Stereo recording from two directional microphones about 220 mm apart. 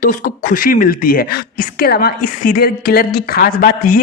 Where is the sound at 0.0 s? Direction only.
35° left (ahead or behind).